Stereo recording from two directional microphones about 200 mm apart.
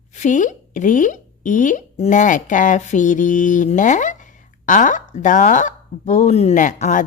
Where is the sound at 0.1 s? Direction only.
35° left (ahead or behind).